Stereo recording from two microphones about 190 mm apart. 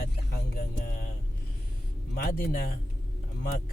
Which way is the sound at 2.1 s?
50° left (ahead or behind).